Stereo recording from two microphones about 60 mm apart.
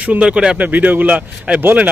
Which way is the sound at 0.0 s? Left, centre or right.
Right.